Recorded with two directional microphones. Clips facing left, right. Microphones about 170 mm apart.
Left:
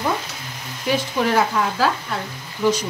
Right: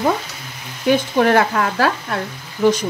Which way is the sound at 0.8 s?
60° right (ahead or behind).